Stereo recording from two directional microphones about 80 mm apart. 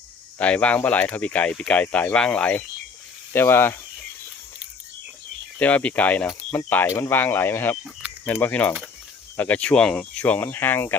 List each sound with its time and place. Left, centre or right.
0.3 s speech: centre
3.3 s speech: left
5.5 s speech: centre
6.8 s speech: left
7.1 s speech: left
8.0 s cricket: centre
8.4 s speech: left